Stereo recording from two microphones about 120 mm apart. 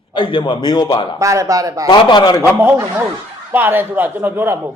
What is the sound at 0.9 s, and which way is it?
Speech, 50° left (ahead or behind).